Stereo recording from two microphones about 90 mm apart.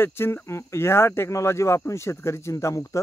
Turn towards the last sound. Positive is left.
turn(degrees=35)  # may be behind; listen again after turning